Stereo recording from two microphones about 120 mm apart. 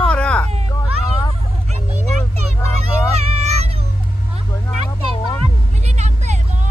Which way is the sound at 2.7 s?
60° right (ahead or behind).